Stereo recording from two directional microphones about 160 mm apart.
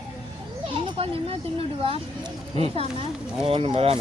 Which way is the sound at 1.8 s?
35° right (ahead or behind).